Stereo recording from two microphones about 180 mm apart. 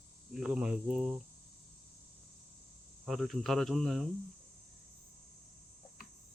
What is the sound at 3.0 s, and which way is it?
Speech, centre (ahead or behind).